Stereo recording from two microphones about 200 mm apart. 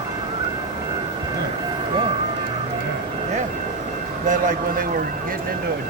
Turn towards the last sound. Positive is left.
turn(degrees=-40)  # may be behind; listen again after turning